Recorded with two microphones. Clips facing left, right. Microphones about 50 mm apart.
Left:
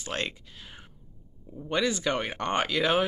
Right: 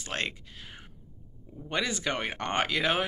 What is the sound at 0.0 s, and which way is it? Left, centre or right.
Speech, right.